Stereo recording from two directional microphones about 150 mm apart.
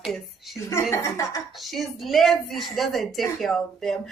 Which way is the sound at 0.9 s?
20° left (ahead or behind).